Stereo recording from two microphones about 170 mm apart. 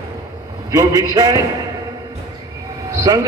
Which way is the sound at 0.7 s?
20° right (ahead or behind).